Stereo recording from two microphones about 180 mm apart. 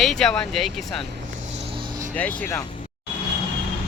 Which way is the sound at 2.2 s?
10° left (ahead or behind).